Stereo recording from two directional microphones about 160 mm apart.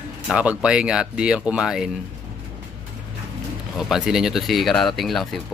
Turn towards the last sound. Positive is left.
turn(degrees=0)  # may be behind; listen again after turning